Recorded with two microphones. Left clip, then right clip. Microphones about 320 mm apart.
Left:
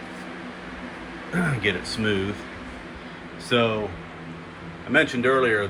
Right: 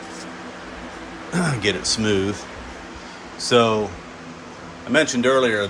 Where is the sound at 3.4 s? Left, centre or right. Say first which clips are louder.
Right 5 dB; centre.